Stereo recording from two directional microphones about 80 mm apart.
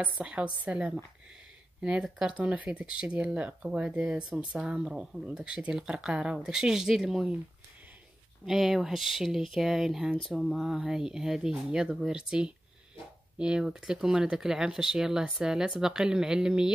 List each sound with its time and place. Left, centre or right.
0.0 s speech: centre
8.5 s speech: centre